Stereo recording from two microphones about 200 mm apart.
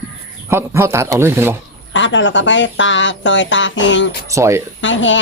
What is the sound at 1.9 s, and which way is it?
Speech, 70° left (ahead or behind).